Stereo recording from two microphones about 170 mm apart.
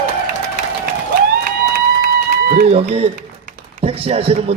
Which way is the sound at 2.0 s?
60° right (ahead or behind).